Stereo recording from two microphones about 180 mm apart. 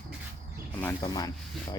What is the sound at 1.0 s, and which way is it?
Speech, 20° left (ahead or behind).